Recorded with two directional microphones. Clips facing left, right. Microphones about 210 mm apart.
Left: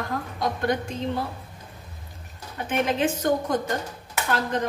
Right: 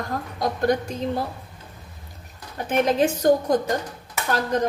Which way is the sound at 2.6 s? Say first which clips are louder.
Right 4 dB; 40° right (ahead or behind).